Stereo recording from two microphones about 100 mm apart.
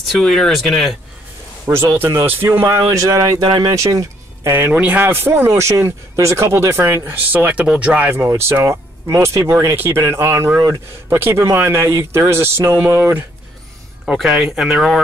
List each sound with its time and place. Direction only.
0.0 s speech: centre (ahead or behind)
2.0 s speech: 20° right (ahead or behind)
4.6 s speech: 15° right (ahead or behind)
14.0 s speech: centre (ahead or behind)